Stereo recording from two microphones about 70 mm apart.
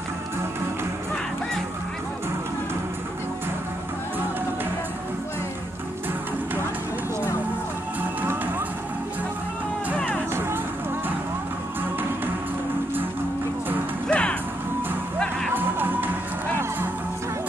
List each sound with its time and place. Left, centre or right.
8.2 s music: right
9.9 s music: centre
14.0 s music: centre
15.5 s music: right